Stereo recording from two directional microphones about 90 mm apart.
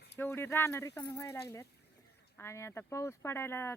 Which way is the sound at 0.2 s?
25° left (ahead or behind).